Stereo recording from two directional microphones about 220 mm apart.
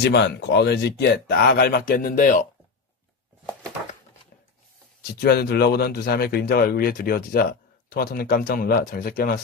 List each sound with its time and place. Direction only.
0.0 s speech: 50° left (ahead or behind)
5.2 s speech: 45° left (ahead or behind)